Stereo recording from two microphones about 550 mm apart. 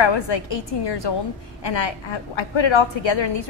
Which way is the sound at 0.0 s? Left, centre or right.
Left.